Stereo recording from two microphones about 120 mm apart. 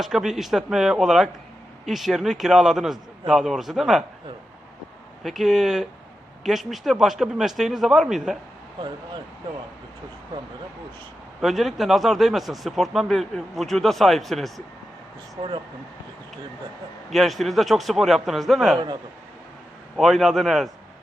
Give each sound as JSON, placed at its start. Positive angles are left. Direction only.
{"t": 0.0, "sound": "speech", "side_deg": -5}
{"t": 5.2, "sound": "speech", "side_deg": 0}
{"t": 10.3, "sound": "speech", "side_deg": -40}
{"t": 11.3, "sound": "speech", "side_deg": 0}
{"t": 17.1, "sound": "speech", "side_deg": 0}
{"t": 20.0, "sound": "speech", "side_deg": 0}